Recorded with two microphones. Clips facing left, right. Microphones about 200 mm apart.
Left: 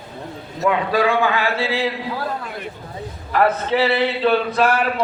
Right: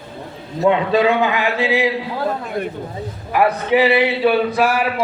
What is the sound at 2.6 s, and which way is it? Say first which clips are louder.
Speech: right 8 dB; 50° right (ahead or behind).